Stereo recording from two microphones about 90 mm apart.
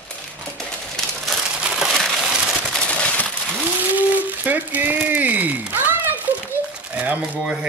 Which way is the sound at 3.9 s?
20° right (ahead or behind).